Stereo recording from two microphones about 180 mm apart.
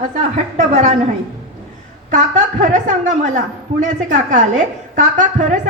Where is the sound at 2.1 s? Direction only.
40° right (ahead or behind).